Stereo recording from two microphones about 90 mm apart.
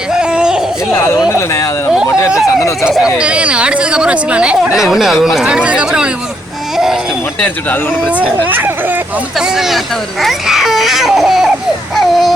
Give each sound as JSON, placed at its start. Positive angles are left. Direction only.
{"t": 0.1, "sound": "a sound", "side_deg": -10}
{"t": 0.9, "sound": "speech", "side_deg": 25}
{"t": 3.2, "sound": "a woman's voice", "side_deg": -10}
{"t": 6.7, "sound": "baby cry", "side_deg": -5}
{"t": 8.0, "sound": "a woman's voice", "side_deg": -15}
{"t": 9.6, "sound": "speech", "side_deg": 0}